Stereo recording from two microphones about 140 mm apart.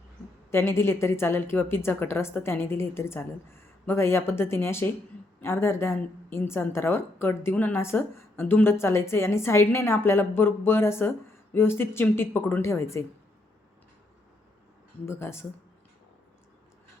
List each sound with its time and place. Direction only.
0.5 s a woman's voice: 20° left (ahead or behind)
15.0 s a woman's voice: 15° left (ahead or behind)